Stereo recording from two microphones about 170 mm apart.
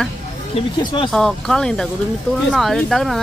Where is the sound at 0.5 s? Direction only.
30° left (ahead or behind).